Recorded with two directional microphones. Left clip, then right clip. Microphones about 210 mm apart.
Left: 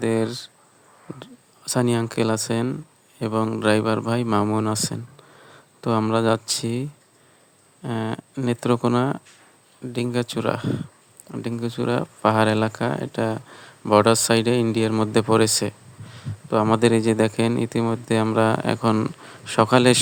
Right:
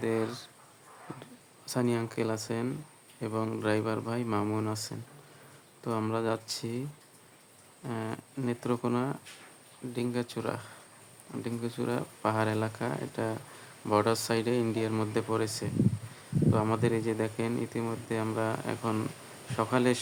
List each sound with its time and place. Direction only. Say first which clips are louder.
0.0 s speech: left 8 dB; 35° left (ahead or behind)
7.9 s speech: left 9 dB; 40° left (ahead or behind)